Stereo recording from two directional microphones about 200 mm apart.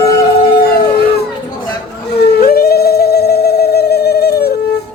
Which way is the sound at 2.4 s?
50° left (ahead or behind).